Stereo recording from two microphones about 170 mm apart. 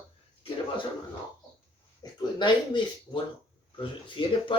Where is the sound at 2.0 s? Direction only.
25° left (ahead or behind).